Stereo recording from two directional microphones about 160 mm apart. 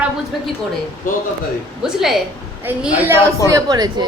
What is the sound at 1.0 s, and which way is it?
Speech, 60° left (ahead or behind).